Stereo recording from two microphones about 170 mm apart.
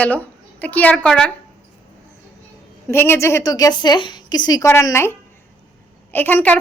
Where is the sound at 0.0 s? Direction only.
10° left (ahead or behind).